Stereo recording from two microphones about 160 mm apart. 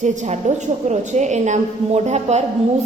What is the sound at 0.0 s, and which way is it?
A woman's voice, 45° right (ahead or behind).